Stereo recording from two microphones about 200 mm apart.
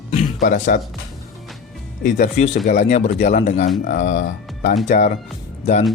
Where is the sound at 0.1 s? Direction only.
35° left (ahead or behind).